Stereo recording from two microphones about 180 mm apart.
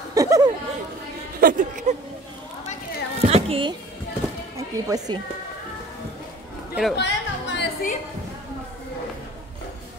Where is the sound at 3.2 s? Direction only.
35° right (ahead or behind).